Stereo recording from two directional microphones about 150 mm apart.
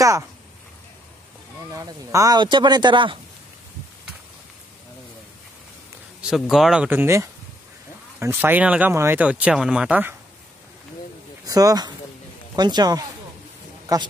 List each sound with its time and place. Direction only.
1.7 s speech: 25° right (ahead or behind)
6.2 s speech: 5° right (ahead or behind)
11.4 s speech: 25° right (ahead or behind)